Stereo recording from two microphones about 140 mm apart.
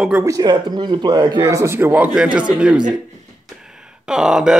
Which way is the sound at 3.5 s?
5° right (ahead or behind).